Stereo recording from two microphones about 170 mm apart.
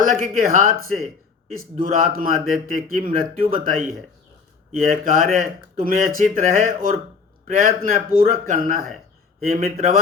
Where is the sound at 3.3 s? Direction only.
55° right (ahead or behind).